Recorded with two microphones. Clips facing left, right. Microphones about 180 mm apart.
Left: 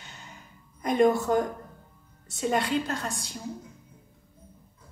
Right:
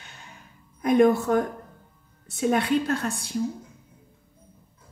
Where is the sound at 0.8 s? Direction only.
60° right (ahead or behind).